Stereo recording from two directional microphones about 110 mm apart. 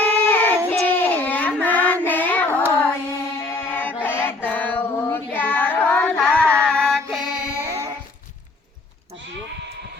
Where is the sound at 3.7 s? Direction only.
15° left (ahead or behind).